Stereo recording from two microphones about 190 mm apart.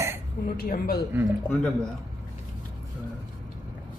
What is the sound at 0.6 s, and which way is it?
Speech, 50° left (ahead or behind).